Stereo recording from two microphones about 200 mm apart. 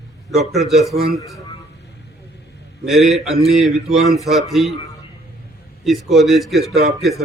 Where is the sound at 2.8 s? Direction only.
Centre (ahead or behind).